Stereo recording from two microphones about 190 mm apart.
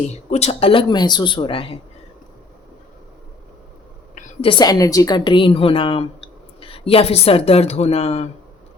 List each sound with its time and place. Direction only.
0.1 s a woman's voice: 35° left (ahead or behind)
4.1 s a woman's voice: 30° left (ahead or behind)